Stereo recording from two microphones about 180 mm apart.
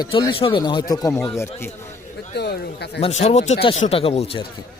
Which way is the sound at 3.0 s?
40° left (ahead or behind).